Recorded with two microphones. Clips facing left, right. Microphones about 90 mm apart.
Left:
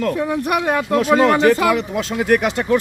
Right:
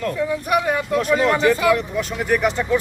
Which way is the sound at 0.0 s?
65° left (ahead or behind).